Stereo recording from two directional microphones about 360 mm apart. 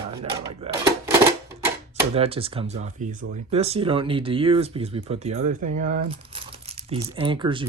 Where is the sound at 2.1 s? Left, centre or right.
Centre.